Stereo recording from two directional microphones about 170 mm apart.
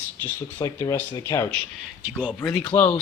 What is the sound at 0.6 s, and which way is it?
Speech, 20° left (ahead or behind).